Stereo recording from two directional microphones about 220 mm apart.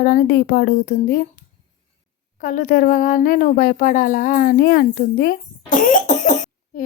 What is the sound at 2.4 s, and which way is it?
Speech, 35° left (ahead or behind).